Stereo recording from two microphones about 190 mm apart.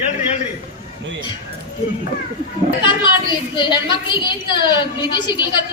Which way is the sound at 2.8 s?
25° left (ahead or behind).